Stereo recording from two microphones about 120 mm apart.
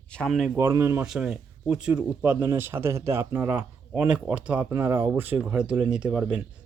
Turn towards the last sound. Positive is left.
turn(degrees=-10)  # may be behind; listen again after turning